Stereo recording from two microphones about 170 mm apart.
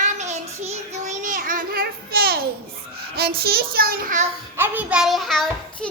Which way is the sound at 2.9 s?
70° right (ahead or behind).